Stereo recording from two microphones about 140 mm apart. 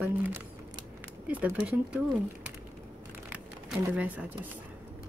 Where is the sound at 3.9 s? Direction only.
10° right (ahead or behind).